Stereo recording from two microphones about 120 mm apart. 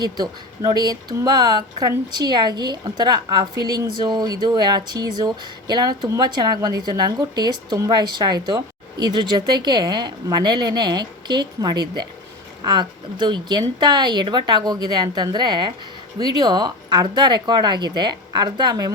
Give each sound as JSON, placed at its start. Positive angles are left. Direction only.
{"t": 0.0, "sound": "speech", "side_deg": -35}